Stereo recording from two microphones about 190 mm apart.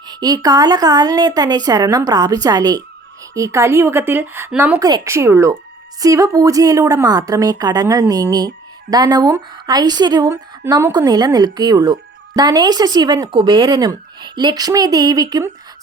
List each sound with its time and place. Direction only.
0.2 s a woman's voice: 20° right (ahead or behind)